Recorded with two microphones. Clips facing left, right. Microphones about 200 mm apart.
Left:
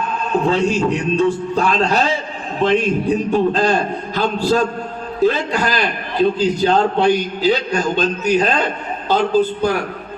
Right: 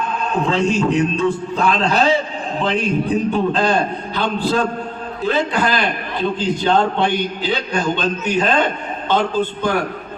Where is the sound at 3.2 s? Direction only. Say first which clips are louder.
Left 2 dB; 40° left (ahead or behind).